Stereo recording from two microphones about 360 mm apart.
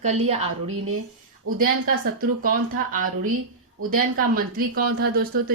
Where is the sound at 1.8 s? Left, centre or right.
Right.